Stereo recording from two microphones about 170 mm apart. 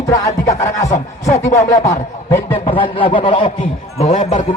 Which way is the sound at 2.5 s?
35° left (ahead or behind).